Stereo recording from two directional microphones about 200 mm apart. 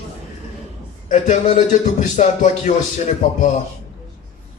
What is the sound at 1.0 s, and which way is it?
Speech, 40° left (ahead or behind).